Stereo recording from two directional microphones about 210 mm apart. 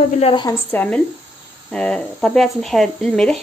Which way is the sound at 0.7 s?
10° left (ahead or behind).